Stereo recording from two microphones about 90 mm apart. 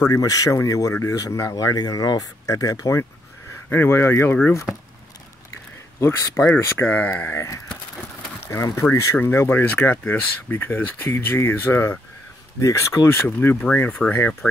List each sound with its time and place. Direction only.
0.1 s speech: 40° left (ahead or behind)
3.7 s speech: 25° left (ahead or behind)
5.9 s speech: 30° left (ahead or behind)
6.4 s speech: 20° left (ahead or behind)
7.3 s speech: 35° left (ahead or behind)
8.4 s a sound: 30° left (ahead or behind)
8.7 s speech: 30° left (ahead or behind)